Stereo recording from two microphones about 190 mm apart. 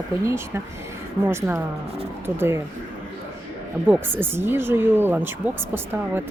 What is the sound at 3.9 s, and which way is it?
Speech, 10° right (ahead or behind).